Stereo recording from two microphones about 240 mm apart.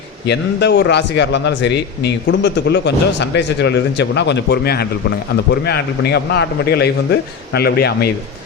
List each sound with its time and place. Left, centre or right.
0.3 s speech: left